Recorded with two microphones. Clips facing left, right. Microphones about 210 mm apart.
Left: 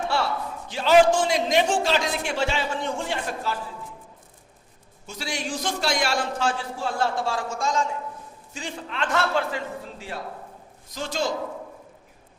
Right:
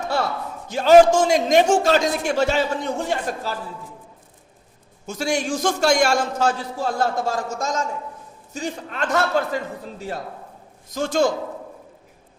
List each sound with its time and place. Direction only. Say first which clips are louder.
0.0 s a man's voice: right 2 dB; 40° right (ahead or behind)
5.0 s a man's voice: right 8 dB; 45° right (ahead or behind)
10.9 s a man's voice: right 7 dB; 50° right (ahead or behind)